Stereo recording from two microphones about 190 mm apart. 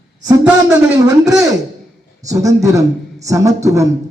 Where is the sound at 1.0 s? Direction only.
20° right (ahead or behind).